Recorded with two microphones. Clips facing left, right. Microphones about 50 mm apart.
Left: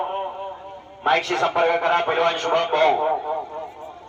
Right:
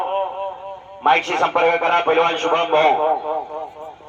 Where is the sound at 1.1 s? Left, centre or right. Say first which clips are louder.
Right 3 dB; right.